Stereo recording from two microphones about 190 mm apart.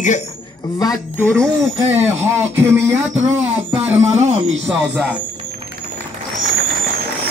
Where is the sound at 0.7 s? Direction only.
15° left (ahead or behind).